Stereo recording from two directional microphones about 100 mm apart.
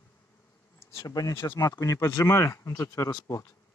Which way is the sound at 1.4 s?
25° left (ahead or behind).